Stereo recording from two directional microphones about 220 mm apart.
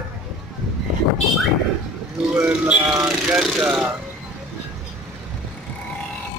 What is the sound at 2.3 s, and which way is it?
Speech, 5° right (ahead or behind).